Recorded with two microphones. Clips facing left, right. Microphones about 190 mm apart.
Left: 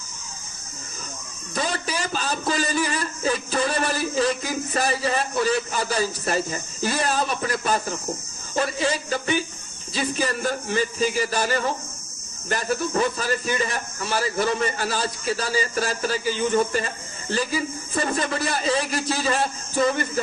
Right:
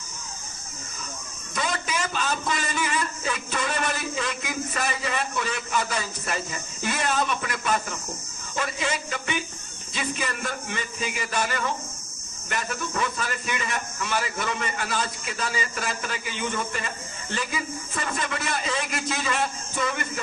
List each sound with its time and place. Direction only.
1.5 s a man's voice: 35° left (ahead or behind)